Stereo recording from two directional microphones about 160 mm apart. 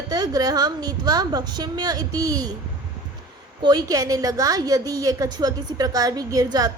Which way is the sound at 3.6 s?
25° right (ahead or behind).